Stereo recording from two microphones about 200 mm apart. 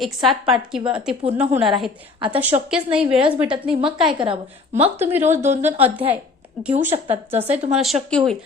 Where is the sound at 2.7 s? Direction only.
5° right (ahead or behind).